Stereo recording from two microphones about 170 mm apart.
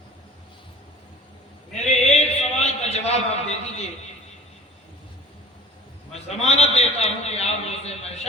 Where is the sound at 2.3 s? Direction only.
40° left (ahead or behind).